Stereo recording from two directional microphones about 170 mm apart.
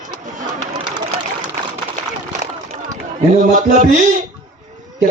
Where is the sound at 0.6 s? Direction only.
25° right (ahead or behind).